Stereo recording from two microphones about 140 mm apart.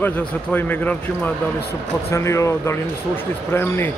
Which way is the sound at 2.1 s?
20° left (ahead or behind).